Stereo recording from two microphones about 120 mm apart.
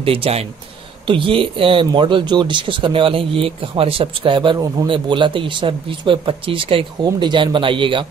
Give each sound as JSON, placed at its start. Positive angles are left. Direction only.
{"t": 0.0, "sound": "speech", "side_deg": -50}